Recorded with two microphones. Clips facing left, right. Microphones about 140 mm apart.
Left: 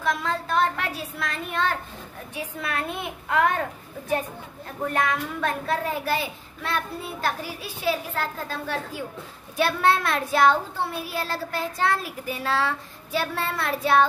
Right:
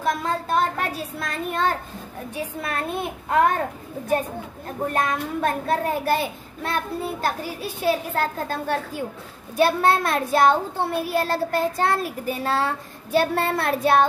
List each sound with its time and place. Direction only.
0.0 s speech: 40° right (ahead or behind)
4.6 s a child's voice: 40° right (ahead or behind)